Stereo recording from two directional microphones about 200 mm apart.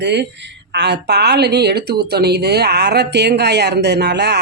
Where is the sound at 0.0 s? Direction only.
60° right (ahead or behind).